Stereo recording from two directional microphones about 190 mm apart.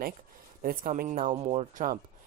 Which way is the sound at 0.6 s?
50° right (ahead or behind).